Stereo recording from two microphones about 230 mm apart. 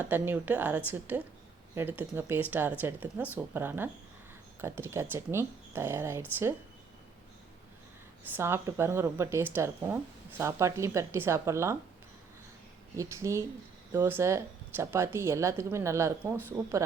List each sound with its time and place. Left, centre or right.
0.0 s speech: centre
8.4 s speech: centre
13.0 s speech: centre